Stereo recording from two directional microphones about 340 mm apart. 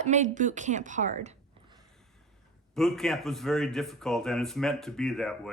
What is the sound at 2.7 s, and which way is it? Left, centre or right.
A man's voice, centre.